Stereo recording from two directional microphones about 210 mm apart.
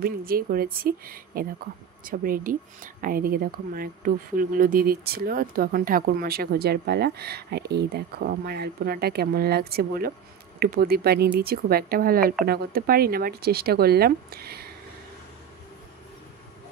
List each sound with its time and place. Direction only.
0.0 s speech: 45° right (ahead or behind)